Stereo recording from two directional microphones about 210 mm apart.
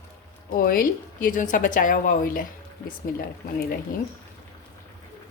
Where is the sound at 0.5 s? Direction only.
45° left (ahead or behind).